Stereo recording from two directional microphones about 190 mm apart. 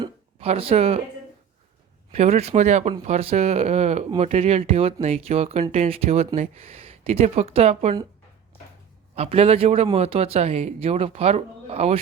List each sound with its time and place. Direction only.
0.0 s a sound: 30° right (ahead or behind)
2.1 s speech: 35° right (ahead or behind)
9.1 s speech: 35° right (ahead or behind)